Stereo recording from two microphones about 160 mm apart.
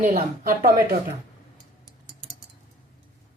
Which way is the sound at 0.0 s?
55° right (ahead or behind).